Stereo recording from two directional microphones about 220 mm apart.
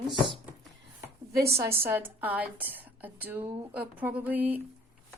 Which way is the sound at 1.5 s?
10° right (ahead or behind).